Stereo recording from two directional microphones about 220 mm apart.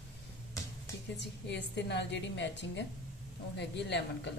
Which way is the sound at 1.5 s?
50° left (ahead or behind).